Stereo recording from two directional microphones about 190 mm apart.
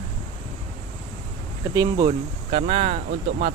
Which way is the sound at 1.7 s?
15° right (ahead or behind).